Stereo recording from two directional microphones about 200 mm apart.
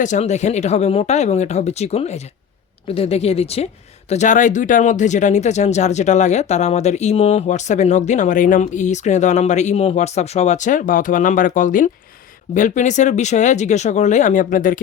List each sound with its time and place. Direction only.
0.0 s speech: 35° left (ahead or behind)